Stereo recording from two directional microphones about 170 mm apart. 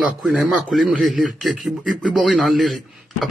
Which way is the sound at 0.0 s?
5° right (ahead or behind).